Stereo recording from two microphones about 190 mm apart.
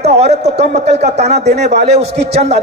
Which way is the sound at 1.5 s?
60° right (ahead or behind).